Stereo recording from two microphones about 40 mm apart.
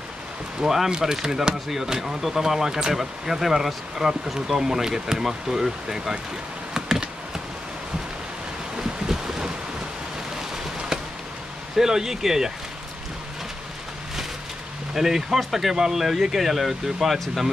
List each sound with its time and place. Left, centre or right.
0.6 s speech: centre
6.7 s computer keyboard: centre
8.7 s boat: centre
10.5 s a sound: centre
11.7 s speech: centre
15.0 s speech: centre